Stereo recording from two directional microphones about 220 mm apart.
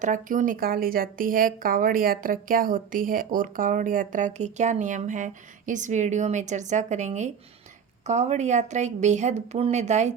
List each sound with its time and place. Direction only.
0.0 s a woman's voice: 35° right (ahead or behind)